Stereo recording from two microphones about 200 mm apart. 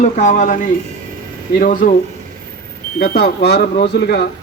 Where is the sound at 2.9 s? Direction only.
50° left (ahead or behind).